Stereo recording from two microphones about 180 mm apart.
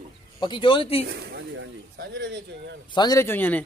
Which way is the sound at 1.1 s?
65° right (ahead or behind).